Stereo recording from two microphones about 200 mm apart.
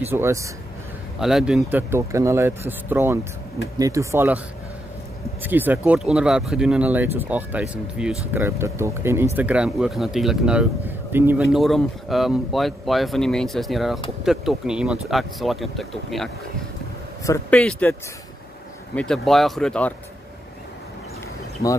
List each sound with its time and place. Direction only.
0.0 s speech: 10° right (ahead or behind)
1.2 s speech: centre (ahead or behind)
5.4 s speech: 10° right (ahead or behind)
17.2 s speech: 15° left (ahead or behind)
18.9 s speech: centre (ahead or behind)